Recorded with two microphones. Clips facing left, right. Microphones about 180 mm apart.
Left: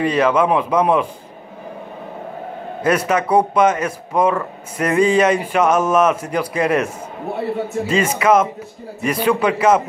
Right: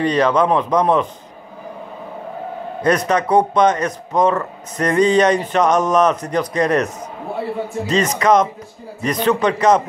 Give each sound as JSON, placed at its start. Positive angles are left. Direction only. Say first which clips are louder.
{"t": 0.0, "sound": "speech", "louder": "even", "side_deg": 5}
{"t": 2.8, "sound": "speech", "louder": "right 1 dB", "side_deg": 5}
{"t": 7.9, "sound": "speech", "louder": "even", "side_deg": 10}